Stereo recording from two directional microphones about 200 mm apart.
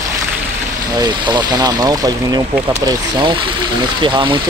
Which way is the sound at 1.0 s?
20° right (ahead or behind).